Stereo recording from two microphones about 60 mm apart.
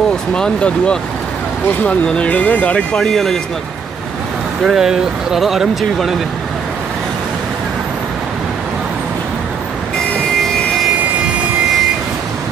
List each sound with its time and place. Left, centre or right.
0.3 s speech: centre
4.6 s speech: centre